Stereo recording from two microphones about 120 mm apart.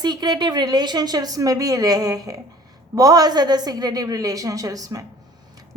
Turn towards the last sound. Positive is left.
turn(degrees=-30)  # may be behind; listen again after turning